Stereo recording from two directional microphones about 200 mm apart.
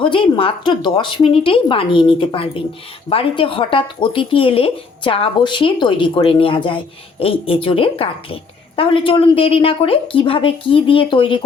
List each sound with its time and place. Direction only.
0.0 s speech: 25° left (ahead or behind)